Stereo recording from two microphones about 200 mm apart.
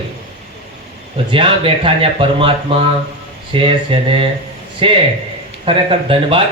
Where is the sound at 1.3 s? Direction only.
25° right (ahead or behind).